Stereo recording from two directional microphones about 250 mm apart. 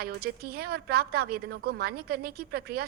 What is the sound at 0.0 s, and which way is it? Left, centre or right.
A woman's voice, right.